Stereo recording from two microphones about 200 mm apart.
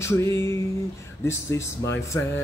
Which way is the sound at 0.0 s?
15° left (ahead or behind).